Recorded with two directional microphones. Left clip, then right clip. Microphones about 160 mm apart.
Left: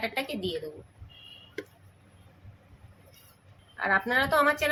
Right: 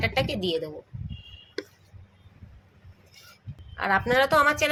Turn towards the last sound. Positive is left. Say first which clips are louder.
# right 3 dB
turn(degrees=-40)  # may be behind; listen again after turning